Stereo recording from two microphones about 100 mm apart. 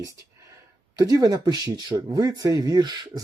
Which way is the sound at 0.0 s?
35° right (ahead or behind).